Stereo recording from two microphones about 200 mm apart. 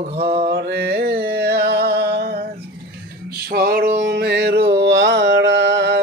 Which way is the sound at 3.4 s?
50° right (ahead or behind).